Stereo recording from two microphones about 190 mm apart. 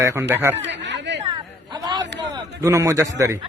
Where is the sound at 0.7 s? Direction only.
65° right (ahead or behind).